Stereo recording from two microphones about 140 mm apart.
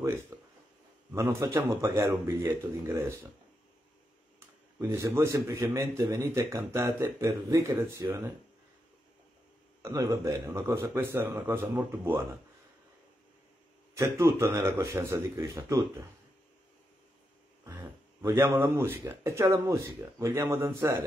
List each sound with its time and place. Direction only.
0.3 s a sound: 20° right (ahead or behind)
1.1 s speech: 20° right (ahead or behind)
4.4 s speech: 20° right (ahead or behind)
9.8 s speech: 20° right (ahead or behind)
13.9 s speech: 20° right (ahead or behind)
17.7 s speech: 20° right (ahead or behind)